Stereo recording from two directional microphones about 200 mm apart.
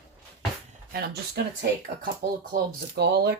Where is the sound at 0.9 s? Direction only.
50° right (ahead or behind).